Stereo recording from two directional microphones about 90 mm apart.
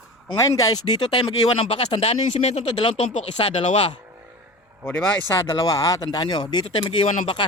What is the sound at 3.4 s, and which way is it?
Speech, 90° left.